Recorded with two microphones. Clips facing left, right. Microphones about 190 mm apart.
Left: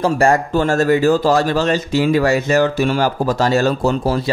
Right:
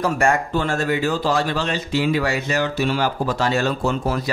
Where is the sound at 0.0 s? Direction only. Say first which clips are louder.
Left 5 dB; 35° left (ahead or behind).